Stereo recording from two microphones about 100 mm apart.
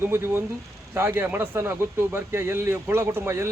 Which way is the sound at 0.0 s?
25° right (ahead or behind).